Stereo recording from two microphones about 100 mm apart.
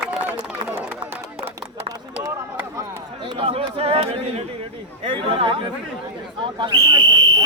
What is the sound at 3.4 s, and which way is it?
Speech, 75° right (ahead or behind).